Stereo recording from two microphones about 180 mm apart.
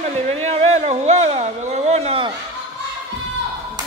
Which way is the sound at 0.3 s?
35° right (ahead or behind).